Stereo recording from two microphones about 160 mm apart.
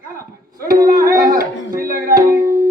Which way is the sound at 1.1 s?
60° right (ahead or behind).